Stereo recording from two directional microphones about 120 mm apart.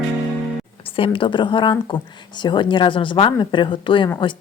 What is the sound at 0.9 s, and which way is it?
A woman's voice, 45° left (ahead or behind).